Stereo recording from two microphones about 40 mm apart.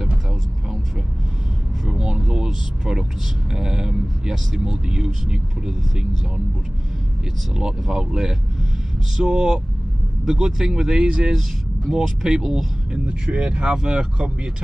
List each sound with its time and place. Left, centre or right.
1.9 s vehicle: centre
3.5 s speech: centre
8.0 s speech: centre
12.9 s speech: right